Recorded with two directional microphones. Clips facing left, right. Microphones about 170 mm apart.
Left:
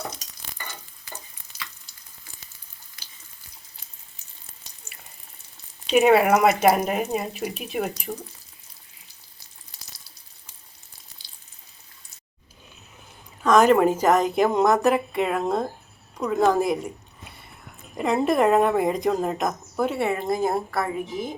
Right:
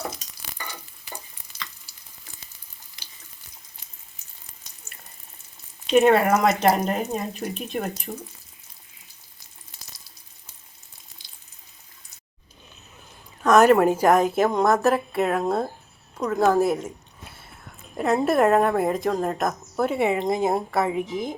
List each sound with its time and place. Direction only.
1.9 s frying: 10° right (ahead or behind)
5.9 s speech: 5° left (ahead or behind)
13.4 s a woman's voice: 10° right (ahead or behind)
17.9 s a woman's voice: centre (ahead or behind)
20.0 s speech: 15° right (ahead or behind)